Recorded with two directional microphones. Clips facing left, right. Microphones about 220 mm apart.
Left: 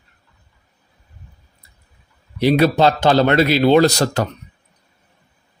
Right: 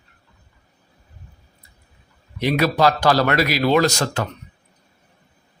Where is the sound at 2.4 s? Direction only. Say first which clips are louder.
Left 4 dB; 30° left (ahead or behind).